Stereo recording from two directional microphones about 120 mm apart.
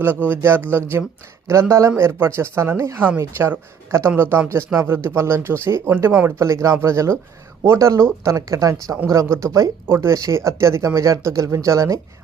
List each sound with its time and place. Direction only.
0.3 s speech: 20° right (ahead or behind)